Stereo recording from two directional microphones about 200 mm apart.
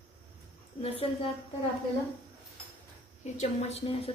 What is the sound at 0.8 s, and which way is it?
Speech, 30° left (ahead or behind).